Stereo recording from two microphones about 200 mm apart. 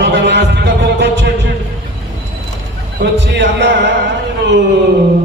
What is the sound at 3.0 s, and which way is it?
Speech, 65° right (ahead or behind).